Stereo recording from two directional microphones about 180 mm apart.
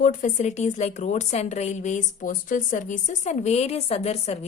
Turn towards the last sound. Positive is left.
turn(degrees=35)  # may be behind; listen again after turning